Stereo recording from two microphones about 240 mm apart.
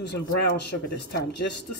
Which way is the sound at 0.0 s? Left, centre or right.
Left.